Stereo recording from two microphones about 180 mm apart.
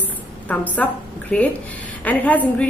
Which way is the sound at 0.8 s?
5° left (ahead or behind).